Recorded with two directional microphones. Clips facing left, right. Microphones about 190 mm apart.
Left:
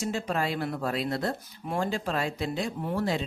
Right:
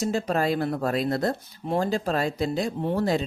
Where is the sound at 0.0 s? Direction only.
40° right (ahead or behind).